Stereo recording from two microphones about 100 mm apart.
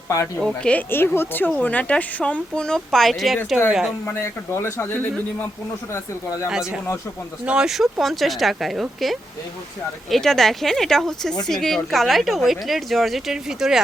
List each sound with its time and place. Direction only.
0.3 s a woman's voice: 5° left (ahead or behind)
4.0 s speech: 25° left (ahead or behind)
6.5 s speech: 5° right (ahead or behind)